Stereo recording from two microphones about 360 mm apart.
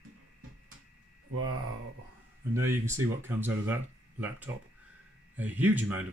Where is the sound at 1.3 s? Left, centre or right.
Right.